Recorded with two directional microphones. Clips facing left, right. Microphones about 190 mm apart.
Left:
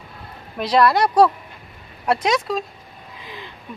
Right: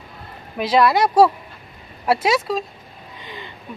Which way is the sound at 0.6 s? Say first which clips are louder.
Even; 5° right (ahead or behind).